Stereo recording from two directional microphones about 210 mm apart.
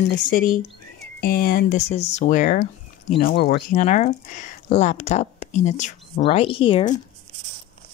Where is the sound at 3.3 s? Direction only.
50° left (ahead or behind); by 6.9 s 25° left (ahead or behind).